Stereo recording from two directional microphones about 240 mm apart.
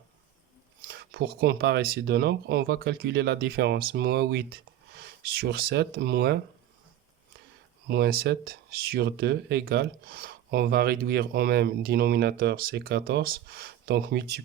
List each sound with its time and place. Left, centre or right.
0.9 s speech: right
7.9 s speech: right